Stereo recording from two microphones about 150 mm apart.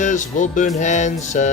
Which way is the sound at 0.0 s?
55° left (ahead or behind).